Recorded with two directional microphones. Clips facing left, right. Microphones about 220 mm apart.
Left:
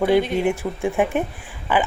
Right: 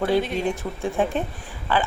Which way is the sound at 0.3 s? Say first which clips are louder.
Left 4 dB; 15° left (ahead or behind).